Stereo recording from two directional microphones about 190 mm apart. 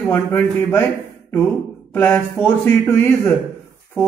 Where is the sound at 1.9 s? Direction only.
5° left (ahead or behind).